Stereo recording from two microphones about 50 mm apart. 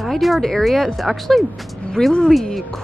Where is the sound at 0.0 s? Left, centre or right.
Centre.